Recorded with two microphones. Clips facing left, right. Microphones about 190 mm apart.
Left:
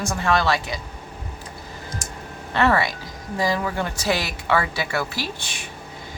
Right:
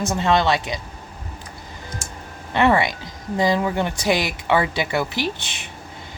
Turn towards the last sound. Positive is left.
turn(degrees=-20)  # may be behind; listen again after turning